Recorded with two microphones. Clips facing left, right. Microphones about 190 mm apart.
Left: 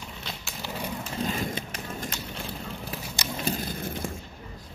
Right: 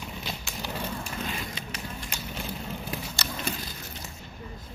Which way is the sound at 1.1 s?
45° left (ahead or behind).